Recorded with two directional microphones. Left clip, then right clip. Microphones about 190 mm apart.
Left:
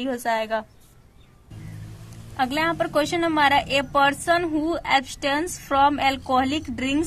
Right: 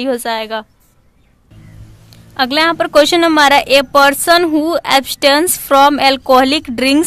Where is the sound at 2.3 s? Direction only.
30° right (ahead or behind).